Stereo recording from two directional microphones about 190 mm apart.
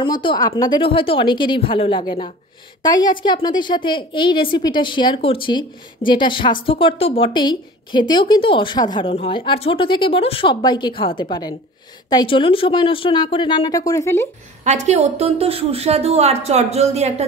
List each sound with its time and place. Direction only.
0.0 s a woman's voice: 25° left (ahead or behind)
14.6 s a woman's voice: 40° right (ahead or behind)